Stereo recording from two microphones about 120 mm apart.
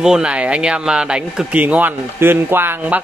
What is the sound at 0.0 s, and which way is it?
Speech, 5° right (ahead or behind).